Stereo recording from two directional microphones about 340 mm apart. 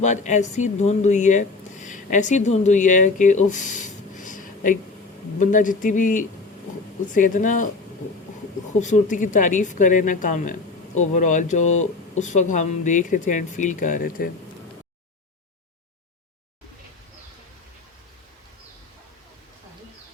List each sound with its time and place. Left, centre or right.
0.0 s speech: left
8.8 s speech: left